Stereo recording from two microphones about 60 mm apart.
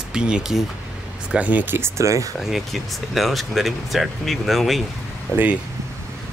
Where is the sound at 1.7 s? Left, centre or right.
Right.